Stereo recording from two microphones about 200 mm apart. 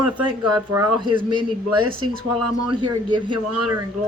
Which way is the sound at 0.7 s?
25° right (ahead or behind).